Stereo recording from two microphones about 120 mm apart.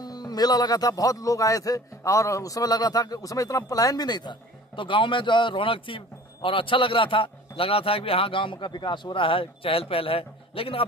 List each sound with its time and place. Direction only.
0.0 s a man's voice: 35° left (ahead or behind); by 10.9 s 50° left (ahead or behind)